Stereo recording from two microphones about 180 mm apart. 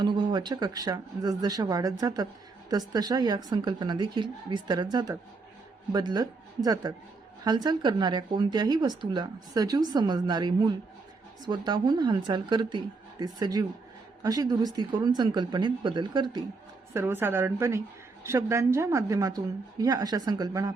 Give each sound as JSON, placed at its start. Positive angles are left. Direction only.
{"t": 0.0, "sound": "speech", "side_deg": -25}
{"t": 16.9, "sound": "a woman's voice", "side_deg": -15}